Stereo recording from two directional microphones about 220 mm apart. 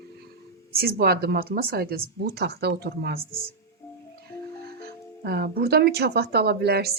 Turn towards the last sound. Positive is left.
turn(degrees=-45)  # may be behind; listen again after turning